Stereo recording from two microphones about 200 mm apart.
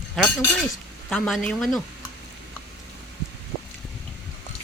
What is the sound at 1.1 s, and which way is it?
Speech, centre (ahead or behind).